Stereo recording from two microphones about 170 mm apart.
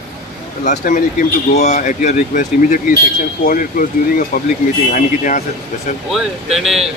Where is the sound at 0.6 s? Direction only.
50° left (ahead or behind).